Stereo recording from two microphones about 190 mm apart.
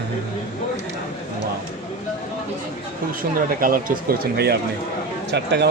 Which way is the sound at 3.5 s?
50° right (ahead or behind).